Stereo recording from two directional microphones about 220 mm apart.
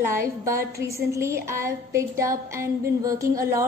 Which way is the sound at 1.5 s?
15° right (ahead or behind).